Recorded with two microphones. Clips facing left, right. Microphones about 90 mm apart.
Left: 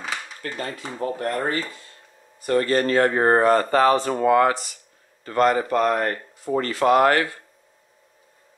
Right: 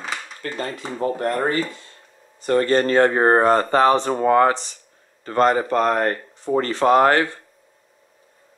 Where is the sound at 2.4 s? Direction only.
30° right (ahead or behind).